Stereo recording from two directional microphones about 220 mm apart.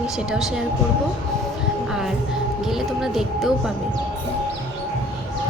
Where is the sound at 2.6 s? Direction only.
Centre (ahead or behind).